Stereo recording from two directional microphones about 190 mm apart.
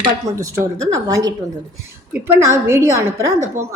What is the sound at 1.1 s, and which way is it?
A woman's voice, 20° right (ahead or behind).